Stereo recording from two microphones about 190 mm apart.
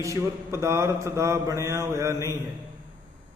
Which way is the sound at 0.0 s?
15° right (ahead or behind).